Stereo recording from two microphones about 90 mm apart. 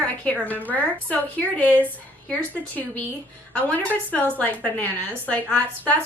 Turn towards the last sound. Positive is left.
turn(degrees=15)  # may be behind; listen again after turning